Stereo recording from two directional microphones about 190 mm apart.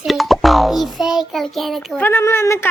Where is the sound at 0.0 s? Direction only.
Centre (ahead or behind).